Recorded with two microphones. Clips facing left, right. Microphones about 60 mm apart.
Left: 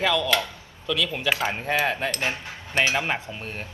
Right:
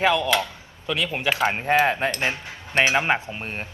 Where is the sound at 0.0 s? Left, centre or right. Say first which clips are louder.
Right 2 dB; right.